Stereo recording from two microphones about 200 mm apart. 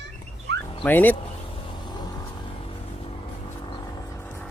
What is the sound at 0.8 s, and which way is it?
Speech, 10° left (ahead or behind).